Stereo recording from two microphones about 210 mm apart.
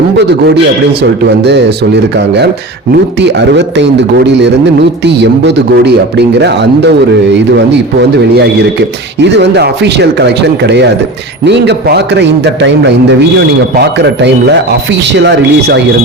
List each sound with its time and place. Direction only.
1.0 s a man's voice: 55° right (ahead or behind)
9.2 s a man's voice: 55° right (ahead or behind)
13.7 s a man's voice: 55° right (ahead or behind)